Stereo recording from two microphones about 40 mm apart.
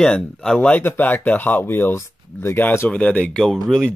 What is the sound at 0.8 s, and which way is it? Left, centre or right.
Speech, left.